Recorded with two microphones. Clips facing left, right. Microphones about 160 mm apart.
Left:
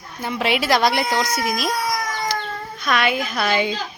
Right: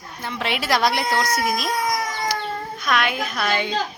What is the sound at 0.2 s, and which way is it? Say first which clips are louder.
A child's voice: left 5 dB; 10° left (ahead or behind).